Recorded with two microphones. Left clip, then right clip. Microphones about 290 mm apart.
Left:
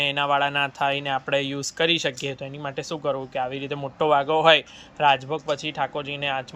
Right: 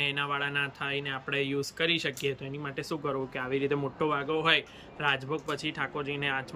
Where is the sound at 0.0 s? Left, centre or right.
Centre.